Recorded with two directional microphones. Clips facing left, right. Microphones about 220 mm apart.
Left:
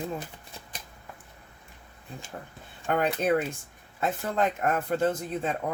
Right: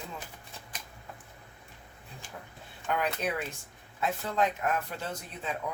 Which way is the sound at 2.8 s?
50° left (ahead or behind).